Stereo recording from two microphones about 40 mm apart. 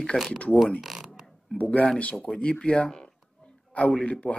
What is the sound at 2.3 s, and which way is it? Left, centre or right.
A man's voice, left.